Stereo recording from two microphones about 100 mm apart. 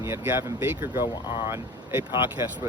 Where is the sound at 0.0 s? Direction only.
25° right (ahead or behind).